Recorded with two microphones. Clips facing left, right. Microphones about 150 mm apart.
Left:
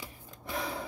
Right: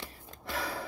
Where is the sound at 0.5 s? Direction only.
20° left (ahead or behind).